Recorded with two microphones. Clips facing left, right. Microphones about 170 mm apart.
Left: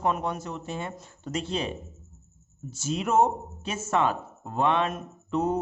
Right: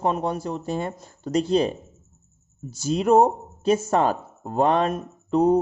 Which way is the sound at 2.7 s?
35° right (ahead or behind).